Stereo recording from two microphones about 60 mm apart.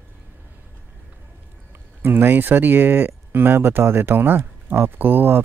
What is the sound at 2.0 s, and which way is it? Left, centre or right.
Speech, right.